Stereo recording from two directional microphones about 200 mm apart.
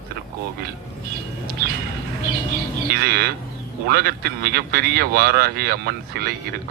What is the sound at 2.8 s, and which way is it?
Speech, 50° right (ahead or behind).